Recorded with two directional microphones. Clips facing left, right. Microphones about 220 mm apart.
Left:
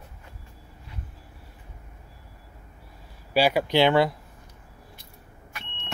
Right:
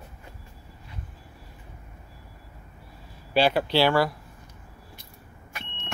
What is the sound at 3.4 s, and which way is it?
Speech, 10° left (ahead or behind).